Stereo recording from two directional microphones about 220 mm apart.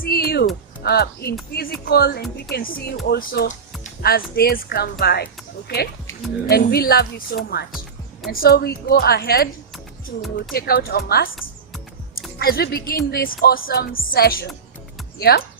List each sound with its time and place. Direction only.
0.0 s music: 45° left (ahead or behind)
0.8 s speech: 45° left (ahead or behind)
10.5 s speech: 45° left (ahead or behind)
12.4 s speech: 45° left (ahead or behind)